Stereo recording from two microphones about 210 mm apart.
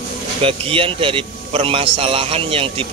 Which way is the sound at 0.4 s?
25° right (ahead or behind).